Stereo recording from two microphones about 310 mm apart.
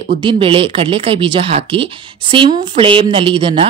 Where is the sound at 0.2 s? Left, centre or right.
Centre.